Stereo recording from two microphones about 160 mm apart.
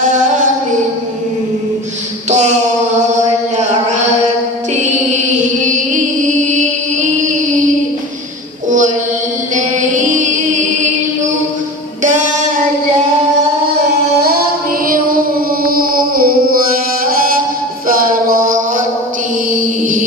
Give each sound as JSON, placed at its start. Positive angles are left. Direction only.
{"t": 2.2, "sound": "a sound", "side_deg": -45}
{"t": 4.7, "sound": "music", "side_deg": -50}
{"t": 9.8, "sound": "music", "side_deg": -50}
{"t": 12.0, "sound": "a sound", "side_deg": -50}
{"t": 14.9, "sound": "music", "side_deg": -65}
{"t": 18.0, "sound": "music", "side_deg": -65}